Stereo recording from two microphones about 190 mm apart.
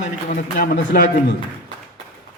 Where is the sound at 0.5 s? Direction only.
50° left (ahead or behind).